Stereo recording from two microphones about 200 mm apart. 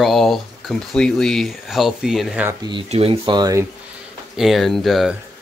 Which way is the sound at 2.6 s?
25° right (ahead or behind).